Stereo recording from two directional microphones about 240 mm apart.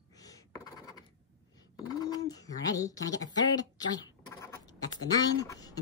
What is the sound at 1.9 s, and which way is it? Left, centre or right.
Speech, centre.